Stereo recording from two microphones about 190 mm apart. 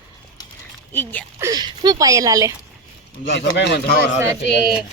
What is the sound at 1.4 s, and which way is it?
Speech, 20° right (ahead or behind).